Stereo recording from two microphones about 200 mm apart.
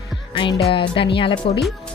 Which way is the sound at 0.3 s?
25° left (ahead or behind).